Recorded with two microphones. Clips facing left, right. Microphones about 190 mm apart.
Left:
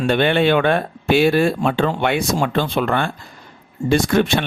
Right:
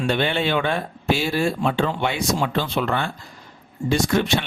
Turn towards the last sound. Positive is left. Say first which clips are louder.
# left 4 dB
turn(degrees=55)  # may be behind; listen again after turning